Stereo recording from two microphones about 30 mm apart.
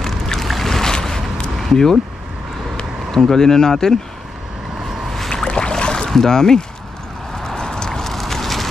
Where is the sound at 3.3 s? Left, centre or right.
Centre.